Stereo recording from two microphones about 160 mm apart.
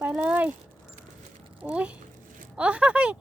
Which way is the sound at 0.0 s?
5° right (ahead or behind).